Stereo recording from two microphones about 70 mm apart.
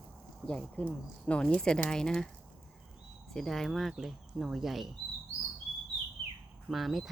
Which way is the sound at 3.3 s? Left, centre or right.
Centre.